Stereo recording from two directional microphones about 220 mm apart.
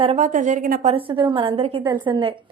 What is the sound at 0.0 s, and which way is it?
A woman's voice, 25° right (ahead or behind).